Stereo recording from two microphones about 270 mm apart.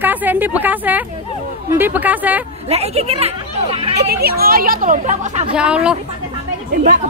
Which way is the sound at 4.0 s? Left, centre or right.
Right.